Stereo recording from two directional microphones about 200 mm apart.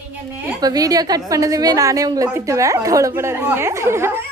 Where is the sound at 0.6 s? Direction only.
20° right (ahead or behind).